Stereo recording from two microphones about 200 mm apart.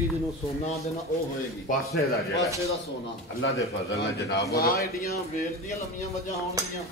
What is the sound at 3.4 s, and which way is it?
Speech, 70° left (ahead or behind).